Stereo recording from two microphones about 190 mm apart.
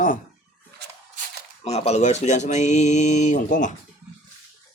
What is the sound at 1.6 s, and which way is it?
Speech, 35° left (ahead or behind).